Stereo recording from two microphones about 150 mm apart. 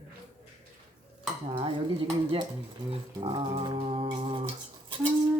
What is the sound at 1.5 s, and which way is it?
Dishes, 35° right (ahead or behind).